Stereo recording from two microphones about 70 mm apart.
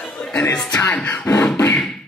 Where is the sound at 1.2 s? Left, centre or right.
Left.